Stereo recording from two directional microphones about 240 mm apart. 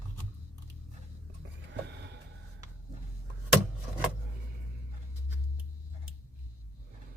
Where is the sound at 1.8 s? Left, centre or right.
Right.